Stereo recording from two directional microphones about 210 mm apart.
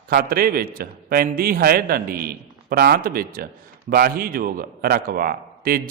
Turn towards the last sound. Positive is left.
turn(degrees=-45)  # may be behind; listen again after turning